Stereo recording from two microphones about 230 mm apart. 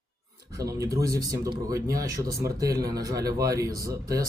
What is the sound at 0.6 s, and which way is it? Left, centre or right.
Speech, centre.